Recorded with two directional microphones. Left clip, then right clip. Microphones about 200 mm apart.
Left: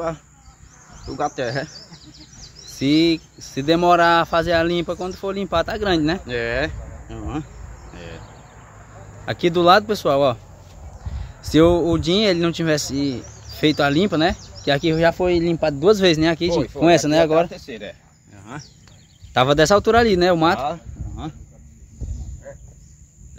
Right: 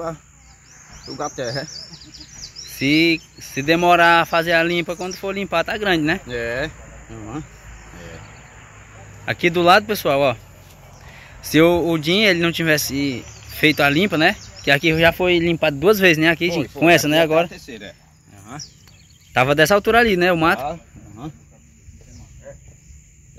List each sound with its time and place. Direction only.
1.2 s speech: 30° left (ahead or behind)
2.7 s speech: 5° left (ahead or behind)
6.2 s speech: 35° left (ahead or behind)
7.9 s a sound: 30° left (ahead or behind)
9.2 s speech: 5° left (ahead or behind)
17.5 s speech: 35° left (ahead or behind)
19.3 s speech: 5° left (ahead or behind)